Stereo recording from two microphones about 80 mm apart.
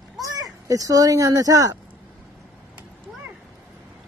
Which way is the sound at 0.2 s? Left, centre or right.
Right.